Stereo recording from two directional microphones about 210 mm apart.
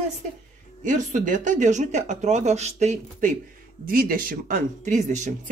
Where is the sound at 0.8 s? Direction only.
35° right (ahead or behind).